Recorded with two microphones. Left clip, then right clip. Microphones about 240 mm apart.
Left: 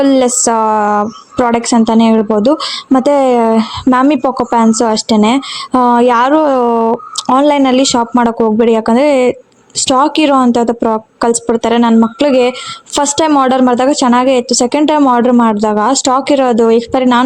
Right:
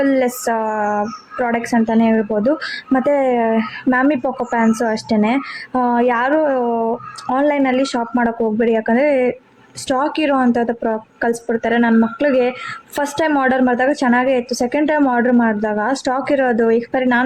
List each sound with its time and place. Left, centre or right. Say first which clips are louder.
0.0 s a woman's voice: left 6 dB; centre